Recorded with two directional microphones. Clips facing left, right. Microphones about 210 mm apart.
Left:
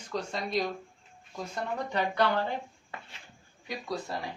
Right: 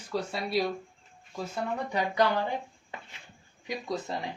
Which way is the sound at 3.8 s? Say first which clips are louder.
Right 1 dB; 20° right (ahead or behind).